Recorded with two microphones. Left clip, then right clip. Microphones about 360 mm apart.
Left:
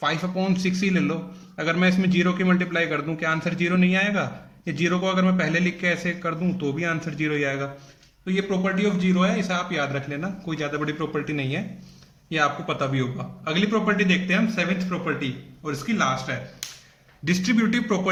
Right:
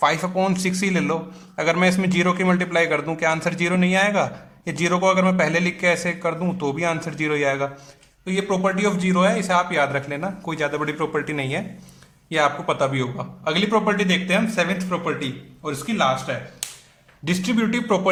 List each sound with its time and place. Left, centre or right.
0.0 s a man's voice: centre